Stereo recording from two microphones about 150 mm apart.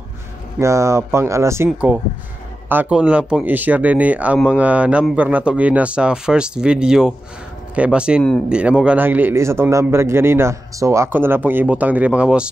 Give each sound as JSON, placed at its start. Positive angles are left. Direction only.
{"t": 0.6, "sound": "a man's voice", "side_deg": -20}